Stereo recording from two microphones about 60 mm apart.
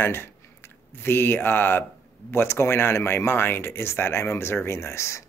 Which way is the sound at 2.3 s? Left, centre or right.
Left.